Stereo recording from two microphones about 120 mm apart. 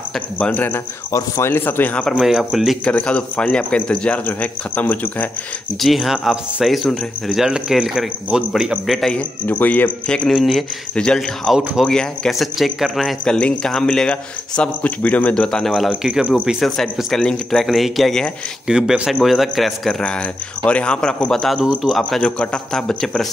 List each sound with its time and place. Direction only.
0.4 s speech: 15° left (ahead or behind)
1.1 s speech: 25° left (ahead or behind)
2.1 s speech: 5° right (ahead or behind)
2.8 s speech: 10° left (ahead or behind)
5.8 s speech: centre (ahead or behind)
15.9 s speech: 10° right (ahead or behind)